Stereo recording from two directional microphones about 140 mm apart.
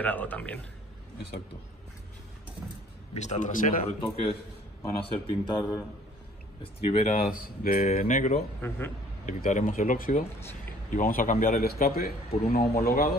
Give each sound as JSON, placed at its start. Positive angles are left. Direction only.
{"t": 0.0, "sound": "a man's voice", "side_deg": 10}
{"t": 3.2, "sound": "a man's voice", "side_deg": 60}
{"t": 5.0, "sound": "speech", "side_deg": 30}
{"t": 6.6, "sound": "speech", "side_deg": 45}
{"t": 7.1, "sound": "speech", "side_deg": 70}
{"t": 8.5, "sound": "a man's voice", "side_deg": 15}
{"t": 9.2, "sound": "a man's voice", "side_deg": 60}